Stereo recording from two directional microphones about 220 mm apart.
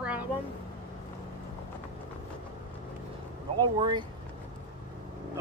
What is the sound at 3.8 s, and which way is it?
Speech, 20° right (ahead or behind).